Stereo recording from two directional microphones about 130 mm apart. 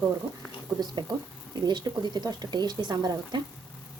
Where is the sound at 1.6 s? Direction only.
35° right (ahead or behind).